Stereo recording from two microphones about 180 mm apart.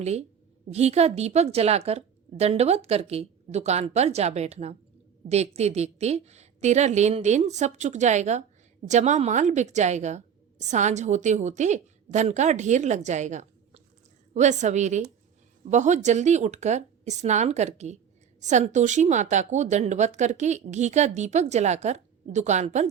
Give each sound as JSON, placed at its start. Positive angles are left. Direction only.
{"t": 0.0, "sound": "speech", "side_deg": -35}